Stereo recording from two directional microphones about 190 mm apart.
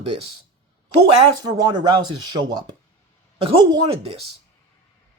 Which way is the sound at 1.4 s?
20° right (ahead or behind).